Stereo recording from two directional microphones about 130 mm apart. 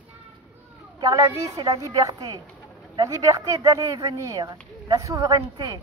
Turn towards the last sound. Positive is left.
turn(degrees=-30)  # may be behind; listen again after turning